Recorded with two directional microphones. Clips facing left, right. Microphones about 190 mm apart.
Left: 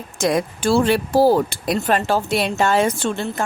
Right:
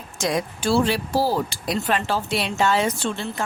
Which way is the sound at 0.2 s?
55° left (ahead or behind).